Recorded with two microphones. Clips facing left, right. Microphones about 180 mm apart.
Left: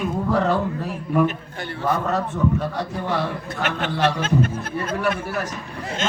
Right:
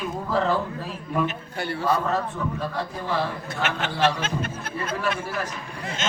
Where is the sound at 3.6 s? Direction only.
50° left (ahead or behind).